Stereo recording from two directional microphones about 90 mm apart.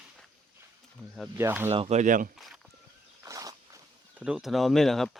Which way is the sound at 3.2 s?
40° right (ahead or behind).